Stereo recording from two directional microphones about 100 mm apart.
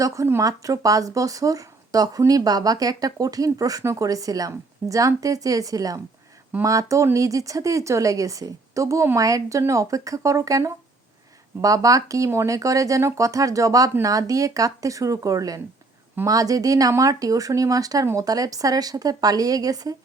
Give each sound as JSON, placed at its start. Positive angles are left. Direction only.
{"t": 0.0, "sound": "speech", "side_deg": -30}